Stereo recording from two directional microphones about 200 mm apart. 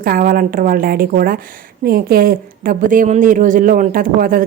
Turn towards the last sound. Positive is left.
turn(degrees=-45)  # may be behind; listen again after turning